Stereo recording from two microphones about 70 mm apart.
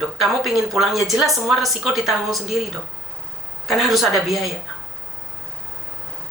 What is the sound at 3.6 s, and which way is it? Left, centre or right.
Speech, centre.